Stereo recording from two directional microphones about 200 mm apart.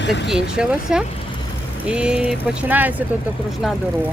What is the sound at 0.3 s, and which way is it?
Speech, 5° right (ahead or behind).